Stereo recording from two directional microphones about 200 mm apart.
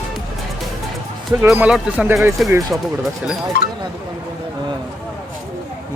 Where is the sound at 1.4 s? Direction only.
10° right (ahead or behind).